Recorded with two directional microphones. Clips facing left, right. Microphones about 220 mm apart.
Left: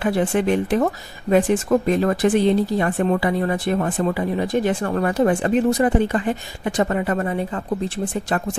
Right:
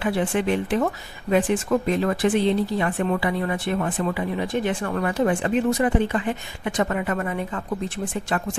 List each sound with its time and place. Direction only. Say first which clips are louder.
0.0 s speech: left 3 dB; 40° left (ahead or behind)